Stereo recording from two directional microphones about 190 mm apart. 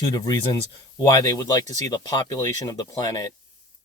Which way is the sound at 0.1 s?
20° left (ahead or behind).